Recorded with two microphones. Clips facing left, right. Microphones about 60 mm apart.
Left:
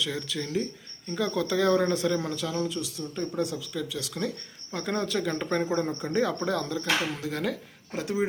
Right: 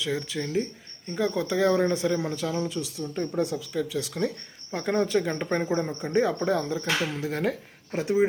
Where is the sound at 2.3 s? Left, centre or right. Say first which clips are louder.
Right 1 dB; right.